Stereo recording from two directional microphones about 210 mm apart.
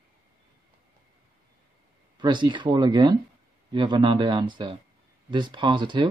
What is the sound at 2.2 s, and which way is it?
Speech, 20° right (ahead or behind).